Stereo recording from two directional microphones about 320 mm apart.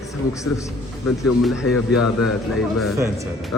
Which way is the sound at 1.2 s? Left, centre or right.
Centre.